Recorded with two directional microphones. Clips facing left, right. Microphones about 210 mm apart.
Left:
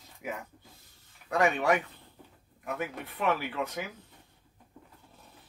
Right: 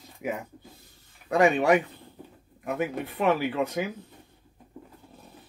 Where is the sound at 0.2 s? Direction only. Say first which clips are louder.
Right 6 dB; 15° right (ahead or behind).